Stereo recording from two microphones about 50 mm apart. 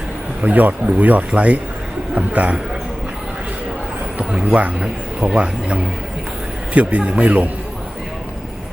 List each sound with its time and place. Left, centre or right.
0.4 s speech: right
4.2 s speech: centre